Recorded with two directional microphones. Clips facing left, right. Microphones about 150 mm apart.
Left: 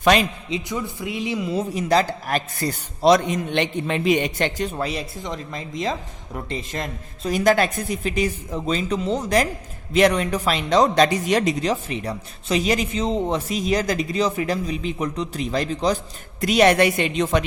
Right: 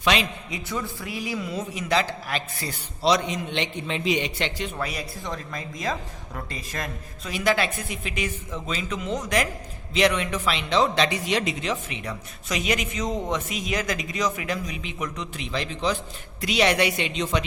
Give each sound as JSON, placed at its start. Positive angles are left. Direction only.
{"t": 0.0, "sound": "a man's voice", "side_deg": 45}
{"t": 0.5, "sound": "a woman's voice", "side_deg": 15}
{"t": 1.7, "sound": "a man's voice", "side_deg": 40}
{"t": 4.8, "sound": "a woman's voice", "side_deg": 25}
{"t": 7.3, "sound": "a man's voice", "side_deg": 45}